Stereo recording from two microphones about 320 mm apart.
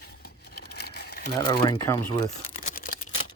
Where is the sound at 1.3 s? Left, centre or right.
Centre.